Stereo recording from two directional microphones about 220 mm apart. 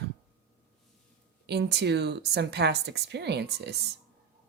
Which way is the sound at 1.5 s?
50° right (ahead or behind).